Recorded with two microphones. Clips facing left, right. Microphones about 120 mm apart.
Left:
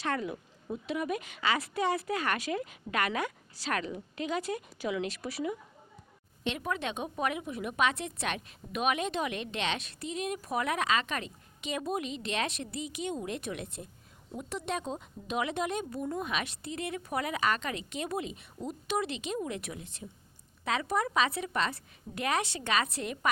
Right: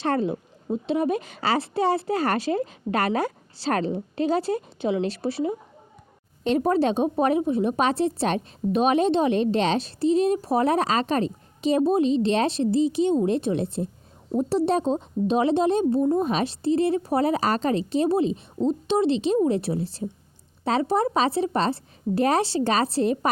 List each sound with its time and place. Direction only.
0.0 s a woman's voice: 30° right (ahead or behind)